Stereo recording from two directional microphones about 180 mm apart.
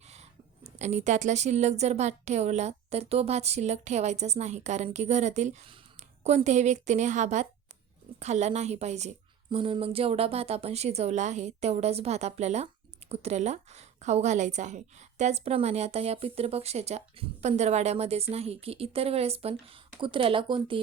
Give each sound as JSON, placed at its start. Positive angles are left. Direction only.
{"t": 0.0, "sound": "a woman's voice", "side_deg": -35}